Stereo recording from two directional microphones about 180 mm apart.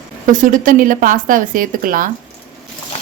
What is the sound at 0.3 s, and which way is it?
Speech, 45° right (ahead or behind).